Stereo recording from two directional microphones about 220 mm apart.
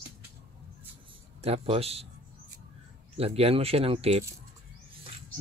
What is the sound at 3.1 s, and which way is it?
Speech, 25° right (ahead or behind).